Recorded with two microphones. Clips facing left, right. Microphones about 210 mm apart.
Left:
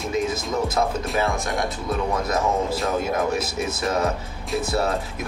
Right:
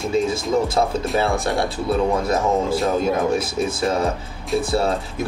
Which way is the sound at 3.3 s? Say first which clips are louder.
Right 4 dB; 30° right (ahead or behind).